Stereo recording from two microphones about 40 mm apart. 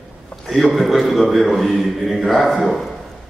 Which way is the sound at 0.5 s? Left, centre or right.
Centre.